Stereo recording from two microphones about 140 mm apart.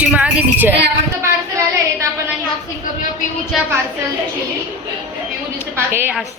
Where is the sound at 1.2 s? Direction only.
20° right (ahead or behind).